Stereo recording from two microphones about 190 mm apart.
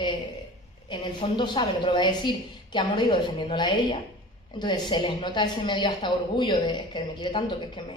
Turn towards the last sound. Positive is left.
turn(degrees=25)  # may be behind; listen again after turning